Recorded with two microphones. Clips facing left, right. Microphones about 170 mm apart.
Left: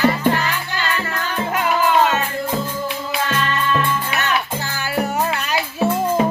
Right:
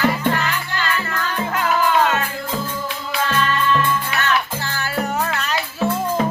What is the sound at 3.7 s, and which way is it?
Music, 15° left (ahead or behind).